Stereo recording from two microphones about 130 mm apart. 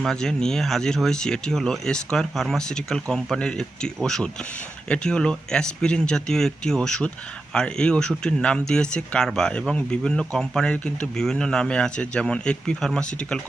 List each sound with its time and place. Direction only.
0.0 s speech: 5° left (ahead or behind)